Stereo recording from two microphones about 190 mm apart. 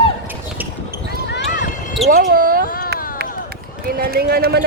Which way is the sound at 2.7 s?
50° left (ahead or behind).